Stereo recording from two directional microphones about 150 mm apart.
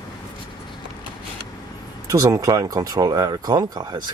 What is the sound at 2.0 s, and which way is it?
Speech, 20° right (ahead or behind).